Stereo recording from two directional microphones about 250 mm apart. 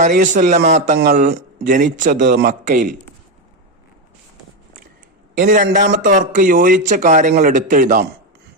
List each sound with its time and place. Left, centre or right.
0.0 s speech: right
5.4 s speech: right